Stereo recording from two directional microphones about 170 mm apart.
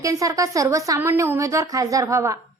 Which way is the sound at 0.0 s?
20° right (ahead or behind).